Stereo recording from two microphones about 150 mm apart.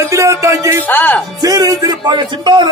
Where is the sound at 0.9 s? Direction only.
10° left (ahead or behind).